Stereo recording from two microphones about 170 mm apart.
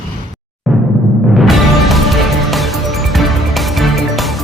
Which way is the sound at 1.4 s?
Centre (ahead or behind).